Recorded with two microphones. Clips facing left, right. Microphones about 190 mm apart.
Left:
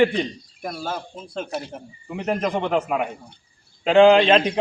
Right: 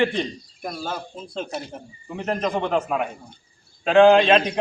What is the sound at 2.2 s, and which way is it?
A man's voice, 15° left (ahead or behind).